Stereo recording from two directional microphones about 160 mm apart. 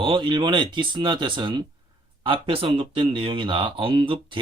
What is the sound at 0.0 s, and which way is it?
Speech, 30° right (ahead or behind).